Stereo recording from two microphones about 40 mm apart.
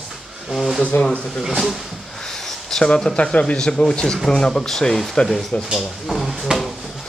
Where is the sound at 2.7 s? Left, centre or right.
Centre.